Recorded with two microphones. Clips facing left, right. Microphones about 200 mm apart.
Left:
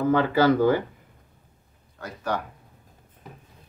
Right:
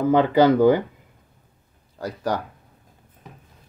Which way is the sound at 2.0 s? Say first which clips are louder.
Right 4 dB; 35° right (ahead or behind).